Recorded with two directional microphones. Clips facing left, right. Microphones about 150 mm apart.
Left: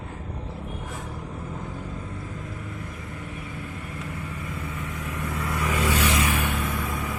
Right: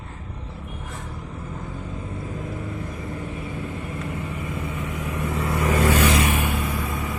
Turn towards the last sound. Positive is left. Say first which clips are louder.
# right 2 dB
turn(degrees=0)  # may be behind; listen again after turning